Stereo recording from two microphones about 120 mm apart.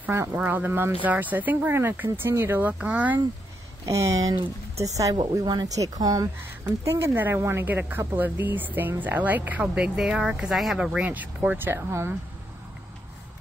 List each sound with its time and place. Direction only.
0.0 s speech: 20° right (ahead or behind)
3.8 s speech: 25° right (ahead or behind)
6.6 s speech: 20° right (ahead or behind)